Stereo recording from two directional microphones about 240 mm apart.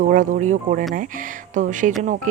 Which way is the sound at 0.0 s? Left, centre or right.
Right.